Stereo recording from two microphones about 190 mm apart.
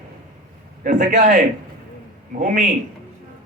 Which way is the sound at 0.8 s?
45° right (ahead or behind).